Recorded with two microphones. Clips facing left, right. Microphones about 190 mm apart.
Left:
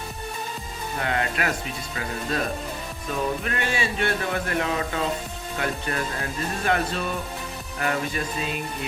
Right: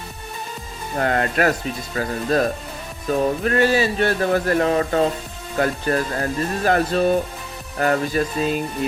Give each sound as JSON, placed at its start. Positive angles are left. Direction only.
{"t": 0.9, "sound": "speech", "side_deg": -45}